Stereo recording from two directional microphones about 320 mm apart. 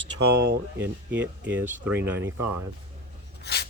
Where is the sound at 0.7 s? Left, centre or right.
Centre.